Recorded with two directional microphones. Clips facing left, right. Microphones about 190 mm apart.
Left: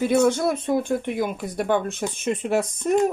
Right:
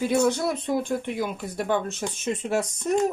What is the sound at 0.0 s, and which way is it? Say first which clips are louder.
Speech: left 3 dB; 55° left (ahead or behind).